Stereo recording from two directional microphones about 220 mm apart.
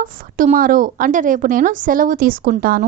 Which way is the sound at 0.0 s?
40° right (ahead or behind).